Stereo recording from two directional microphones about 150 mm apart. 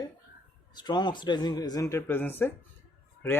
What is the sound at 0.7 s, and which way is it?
Speech, 30° left (ahead or behind).